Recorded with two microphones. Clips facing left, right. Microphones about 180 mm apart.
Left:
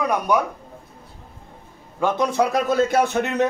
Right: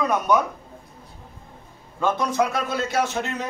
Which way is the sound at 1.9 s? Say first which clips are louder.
Left 2 dB; 15° left (ahead or behind).